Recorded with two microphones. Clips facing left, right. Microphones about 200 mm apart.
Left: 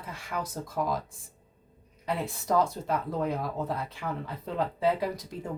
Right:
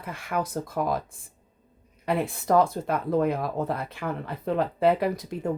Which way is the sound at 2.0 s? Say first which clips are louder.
Right 5 dB; 55° right (ahead or behind).